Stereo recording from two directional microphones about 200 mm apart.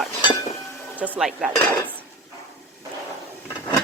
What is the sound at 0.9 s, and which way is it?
Speech, 10° right (ahead or behind).